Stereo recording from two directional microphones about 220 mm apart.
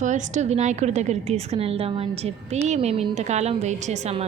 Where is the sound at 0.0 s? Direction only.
35° right (ahead or behind).